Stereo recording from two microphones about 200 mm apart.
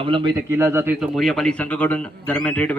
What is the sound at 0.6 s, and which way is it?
Speech, 10° right (ahead or behind).